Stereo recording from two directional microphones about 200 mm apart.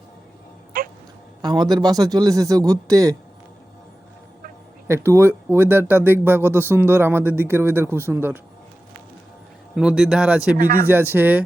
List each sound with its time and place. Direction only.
0.7 s cat: 45° right (ahead or behind)
1.4 s a man's voice: 20° right (ahead or behind)
4.9 s speech: 15° right (ahead or behind)
9.7 s speech: 5° right (ahead or behind)
10.6 s speech: 45° right (ahead or behind)
10.8 s speech: 10° right (ahead or behind)